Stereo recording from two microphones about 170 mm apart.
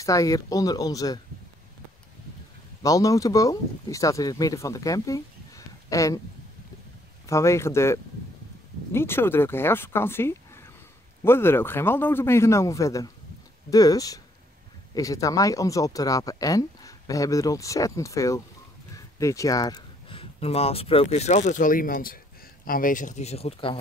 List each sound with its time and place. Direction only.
0.0 s speech: 20° left (ahead or behind)
2.8 s speech: 20° left (ahead or behind)
7.2 s a man's voice: 15° left (ahead or behind); by 23.8 s 35° left (ahead or behind)